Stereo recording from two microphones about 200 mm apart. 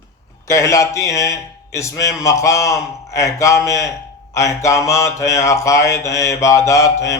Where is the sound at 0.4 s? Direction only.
15° left (ahead or behind).